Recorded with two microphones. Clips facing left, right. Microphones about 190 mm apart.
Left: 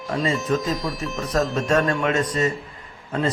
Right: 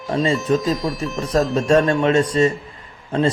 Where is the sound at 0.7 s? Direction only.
Centre (ahead or behind).